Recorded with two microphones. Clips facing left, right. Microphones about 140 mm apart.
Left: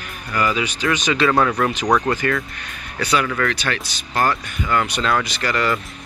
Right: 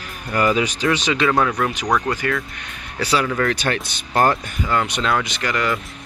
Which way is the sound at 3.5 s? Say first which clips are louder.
Right 3 dB; 45° right (ahead or behind).